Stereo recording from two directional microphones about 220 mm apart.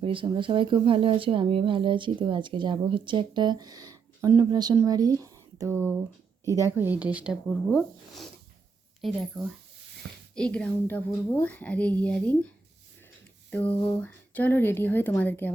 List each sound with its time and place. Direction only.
0.0 s a woman's voice: 25° right (ahead or behind); by 12.5 s 5° left (ahead or behind)
13.5 s a woman's voice: 5° left (ahead or behind)